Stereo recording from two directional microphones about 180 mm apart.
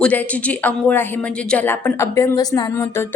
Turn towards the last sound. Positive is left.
turn(degrees=15)  # may be behind; listen again after turning